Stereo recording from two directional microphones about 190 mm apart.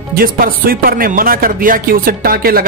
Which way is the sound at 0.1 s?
50° right (ahead or behind).